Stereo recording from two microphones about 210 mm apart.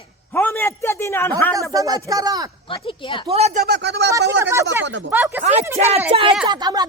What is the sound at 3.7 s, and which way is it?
Speech, 55° right (ahead or behind).